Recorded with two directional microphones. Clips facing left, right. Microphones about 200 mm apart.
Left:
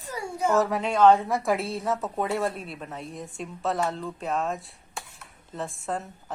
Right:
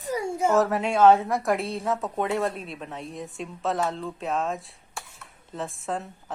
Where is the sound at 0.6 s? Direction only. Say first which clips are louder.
Even; centre (ahead or behind).